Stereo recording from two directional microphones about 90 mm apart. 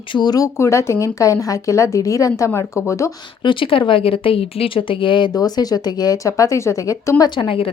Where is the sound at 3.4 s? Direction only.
70° left (ahead or behind).